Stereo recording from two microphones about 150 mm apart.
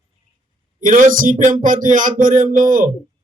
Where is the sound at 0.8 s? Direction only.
60° right (ahead or behind).